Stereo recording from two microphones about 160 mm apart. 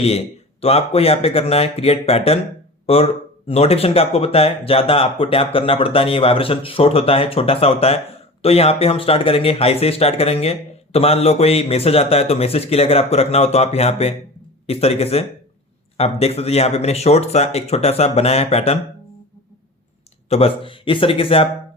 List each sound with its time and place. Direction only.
0.6 s speech: 40° left (ahead or behind)
20.3 s speech: 35° left (ahead or behind)